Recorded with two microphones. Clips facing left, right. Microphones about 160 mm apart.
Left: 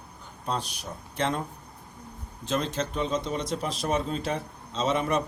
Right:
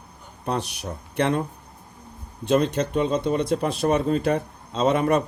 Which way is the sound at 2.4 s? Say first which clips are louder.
Right 8 dB; 65° right (ahead or behind).